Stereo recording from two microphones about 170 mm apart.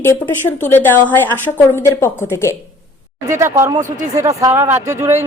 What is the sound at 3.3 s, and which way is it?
Speech, 15° right (ahead or behind).